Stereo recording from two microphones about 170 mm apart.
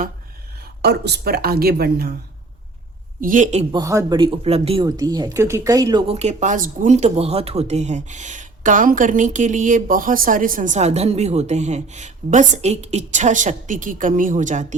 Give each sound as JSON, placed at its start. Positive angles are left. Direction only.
{"t": 0.8, "sound": "speech", "side_deg": -75}
{"t": 3.2, "sound": "speech", "side_deg": -50}
{"t": 3.7, "sound": "speech", "side_deg": -20}
{"t": 4.2, "sound": "speech", "side_deg": -35}
{"t": 4.9, "sound": "speech", "side_deg": -20}
{"t": 6.1, "sound": "speech", "side_deg": -40}